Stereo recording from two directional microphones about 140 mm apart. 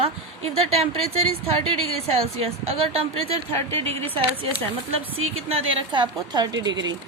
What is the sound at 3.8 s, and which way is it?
A woman's voice, 40° right (ahead or behind).